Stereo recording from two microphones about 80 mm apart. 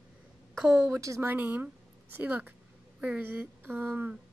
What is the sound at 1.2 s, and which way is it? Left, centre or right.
Speech, right.